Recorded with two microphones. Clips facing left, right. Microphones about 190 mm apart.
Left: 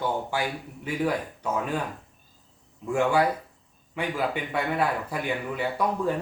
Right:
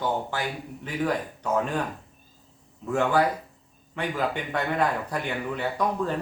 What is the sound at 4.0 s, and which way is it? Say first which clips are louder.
A woman's voice: even; 10° left (ahead or behind).